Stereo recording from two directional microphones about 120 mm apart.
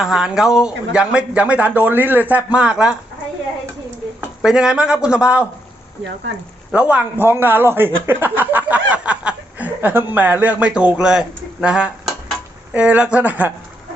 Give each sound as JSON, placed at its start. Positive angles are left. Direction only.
{"t": 0.0, "sound": "speech", "side_deg": -5}
{"t": 4.4, "sound": "speech", "side_deg": -5}
{"t": 6.7, "sound": "speech", "side_deg": -10}